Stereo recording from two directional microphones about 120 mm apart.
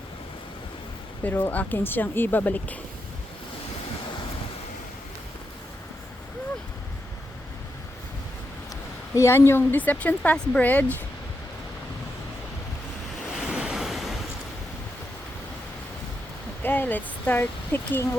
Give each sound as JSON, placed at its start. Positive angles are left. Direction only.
{"t": 1.2, "sound": "speech", "side_deg": 15}
{"t": 9.1, "sound": "speech", "side_deg": 20}
{"t": 13.5, "sound": "waves", "side_deg": -5}
{"t": 16.6, "sound": "speech", "side_deg": 15}